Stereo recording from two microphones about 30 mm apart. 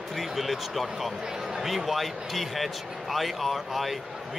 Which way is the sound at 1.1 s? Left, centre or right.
Right.